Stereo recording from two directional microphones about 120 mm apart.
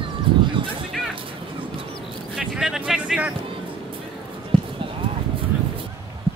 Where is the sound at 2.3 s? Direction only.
5° right (ahead or behind).